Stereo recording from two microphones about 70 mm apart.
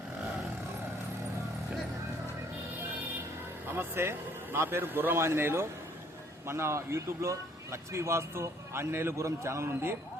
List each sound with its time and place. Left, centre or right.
3.7 s speech: right